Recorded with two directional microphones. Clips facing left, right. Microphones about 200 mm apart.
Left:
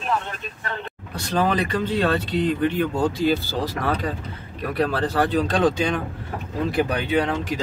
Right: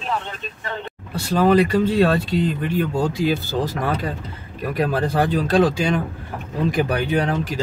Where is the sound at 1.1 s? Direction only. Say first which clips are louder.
Right 6 dB; 10° right (ahead or behind).